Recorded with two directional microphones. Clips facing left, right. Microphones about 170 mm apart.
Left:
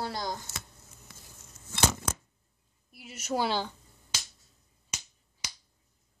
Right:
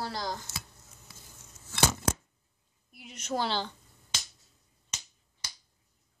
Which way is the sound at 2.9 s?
5° left (ahead or behind).